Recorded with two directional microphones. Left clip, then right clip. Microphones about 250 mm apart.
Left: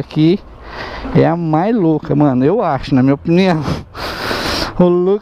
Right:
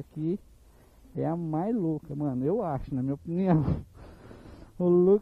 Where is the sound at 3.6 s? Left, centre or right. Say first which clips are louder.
Left 15 dB; centre.